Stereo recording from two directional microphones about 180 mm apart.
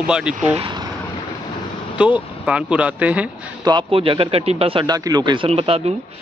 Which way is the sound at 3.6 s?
25° right (ahead or behind).